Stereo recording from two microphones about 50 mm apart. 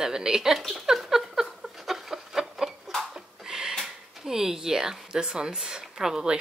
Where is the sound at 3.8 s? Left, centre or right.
Centre.